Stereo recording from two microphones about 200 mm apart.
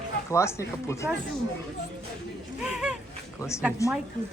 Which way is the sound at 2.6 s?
5° right (ahead or behind).